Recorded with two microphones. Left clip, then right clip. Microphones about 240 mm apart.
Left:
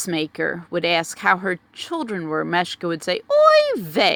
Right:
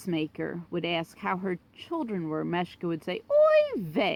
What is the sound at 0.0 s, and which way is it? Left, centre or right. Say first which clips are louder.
Speech: left 9 dB; left.